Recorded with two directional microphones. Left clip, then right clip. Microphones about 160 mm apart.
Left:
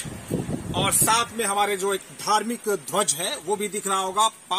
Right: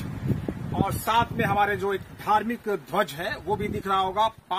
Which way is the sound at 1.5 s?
10° right (ahead or behind).